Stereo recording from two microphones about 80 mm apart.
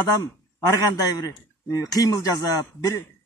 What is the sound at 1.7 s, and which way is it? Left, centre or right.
Speech, left.